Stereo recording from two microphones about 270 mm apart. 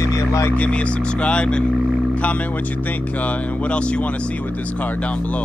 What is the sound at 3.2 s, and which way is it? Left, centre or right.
Speech, centre.